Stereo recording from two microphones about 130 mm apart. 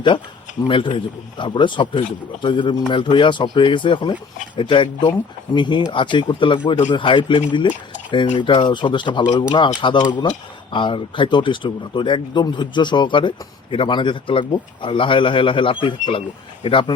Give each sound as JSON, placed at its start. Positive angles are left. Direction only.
{"t": 0.7, "sound": "speech", "side_deg": 40}